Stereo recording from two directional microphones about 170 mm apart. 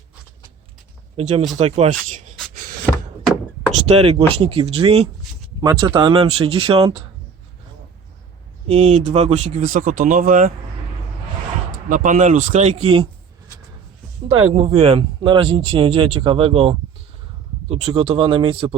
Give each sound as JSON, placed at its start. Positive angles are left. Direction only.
{"t": 1.1, "sound": "speech", "side_deg": -45}
{"t": 3.8, "sound": "speech", "side_deg": -35}
{"t": 5.5, "sound": "speech", "side_deg": -25}
{"t": 8.6, "sound": "speech", "side_deg": -40}
{"t": 11.9, "sound": "speech", "side_deg": -50}
{"t": 14.3, "sound": "speech", "side_deg": -35}